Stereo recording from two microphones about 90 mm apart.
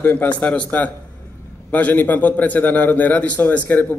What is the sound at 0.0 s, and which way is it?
A man's voice, 20° left (ahead or behind).